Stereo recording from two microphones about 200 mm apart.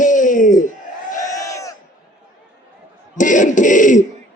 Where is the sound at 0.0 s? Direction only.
40° left (ahead or behind).